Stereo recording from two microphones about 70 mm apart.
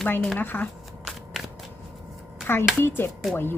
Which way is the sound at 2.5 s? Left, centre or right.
Left.